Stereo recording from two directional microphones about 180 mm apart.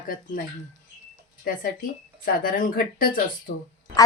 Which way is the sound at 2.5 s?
50° left (ahead or behind).